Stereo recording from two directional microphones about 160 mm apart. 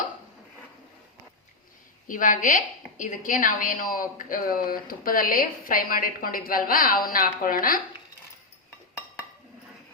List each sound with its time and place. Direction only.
2.0 s a woman's voice: 55° left (ahead or behind)